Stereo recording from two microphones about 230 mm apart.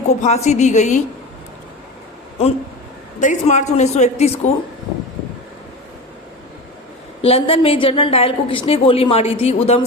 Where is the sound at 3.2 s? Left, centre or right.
Left.